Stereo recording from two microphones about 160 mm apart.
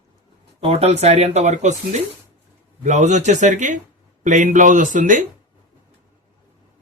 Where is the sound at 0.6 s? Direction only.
35° right (ahead or behind); by 5.3 s 55° right (ahead or behind).